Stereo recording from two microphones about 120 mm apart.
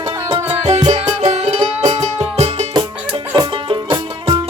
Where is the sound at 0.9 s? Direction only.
70° right (ahead or behind); by 2.2 s 45° right (ahead or behind).